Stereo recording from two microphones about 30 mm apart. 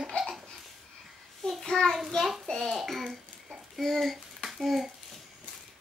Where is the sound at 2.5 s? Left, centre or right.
Centre.